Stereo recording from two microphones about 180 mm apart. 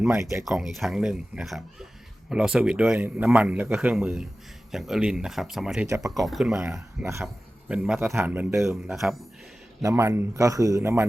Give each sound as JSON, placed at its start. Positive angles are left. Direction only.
{"t": 0.1, "sound": "speech", "side_deg": -15}
{"t": 0.4, "sound": "speech", "side_deg": 0}
{"t": 6.6, "sound": "speech", "side_deg": -15}
{"t": 7.7, "sound": "speech", "side_deg": -5}
{"t": 8.7, "sound": "speech", "side_deg": 0}
{"t": 9.8, "sound": "speech", "side_deg": -15}